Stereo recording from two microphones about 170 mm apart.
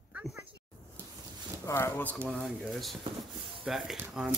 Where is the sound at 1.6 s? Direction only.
15° left (ahead or behind).